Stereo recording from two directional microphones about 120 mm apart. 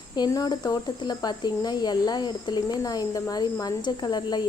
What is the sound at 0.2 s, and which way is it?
Speech, 35° left (ahead or behind).